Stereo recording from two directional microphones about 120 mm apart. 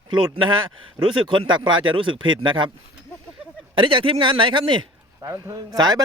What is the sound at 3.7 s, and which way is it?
Speech, 45° right (ahead or behind).